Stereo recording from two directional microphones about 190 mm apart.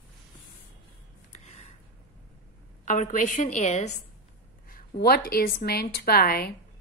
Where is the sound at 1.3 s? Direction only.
35° left (ahead or behind).